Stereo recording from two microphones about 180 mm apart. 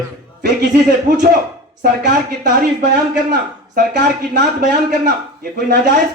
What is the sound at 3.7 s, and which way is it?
Speech, 50° right (ahead or behind).